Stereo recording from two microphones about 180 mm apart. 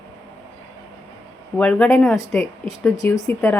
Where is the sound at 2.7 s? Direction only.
20° left (ahead or behind).